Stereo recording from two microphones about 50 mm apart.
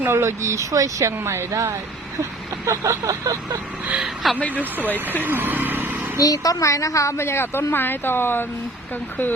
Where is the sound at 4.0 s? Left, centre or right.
Centre.